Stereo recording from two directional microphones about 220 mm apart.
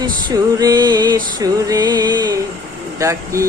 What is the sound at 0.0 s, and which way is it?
Music, 20° right (ahead or behind).